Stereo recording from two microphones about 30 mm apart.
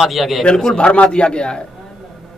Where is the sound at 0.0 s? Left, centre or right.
Centre.